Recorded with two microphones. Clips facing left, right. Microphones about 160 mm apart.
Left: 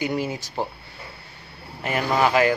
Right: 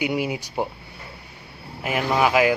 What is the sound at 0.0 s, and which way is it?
Speech, 10° right (ahead or behind).